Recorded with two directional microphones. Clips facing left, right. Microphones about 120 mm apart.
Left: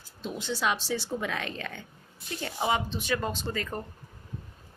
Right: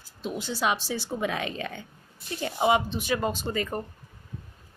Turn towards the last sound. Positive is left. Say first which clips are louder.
# right 3 dB
turn(degrees=-15)  # may be behind; listen again after turning